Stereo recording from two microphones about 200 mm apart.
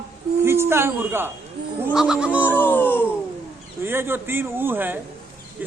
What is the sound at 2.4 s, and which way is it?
Baby cry, 10° left (ahead or behind).